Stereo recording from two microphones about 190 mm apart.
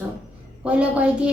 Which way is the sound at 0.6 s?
5° right (ahead or behind).